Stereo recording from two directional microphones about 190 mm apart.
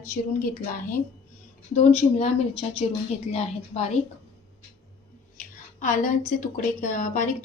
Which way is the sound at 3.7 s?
30° left (ahead or behind).